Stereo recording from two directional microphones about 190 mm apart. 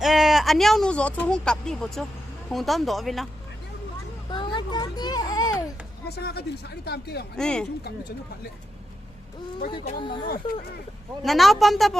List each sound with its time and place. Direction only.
0.0 s speech: centre (ahead or behind)
4.3 s children playing: 25° left (ahead or behind)
6.1 s speech: 55° left (ahead or behind)
7.3 s speech: 5° left (ahead or behind)
9.7 s speech: 25° left (ahead or behind)
10.2 s speech: 50° left (ahead or behind)
11.2 s speech: centre (ahead or behind)